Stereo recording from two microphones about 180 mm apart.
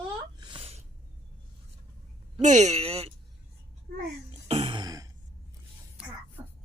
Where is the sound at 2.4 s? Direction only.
40° right (ahead or behind).